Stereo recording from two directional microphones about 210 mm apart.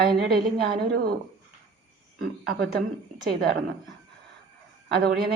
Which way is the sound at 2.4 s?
50° right (ahead or behind).